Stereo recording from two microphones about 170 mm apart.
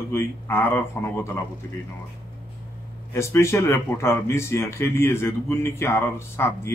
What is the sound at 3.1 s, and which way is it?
Speech, 15° left (ahead or behind).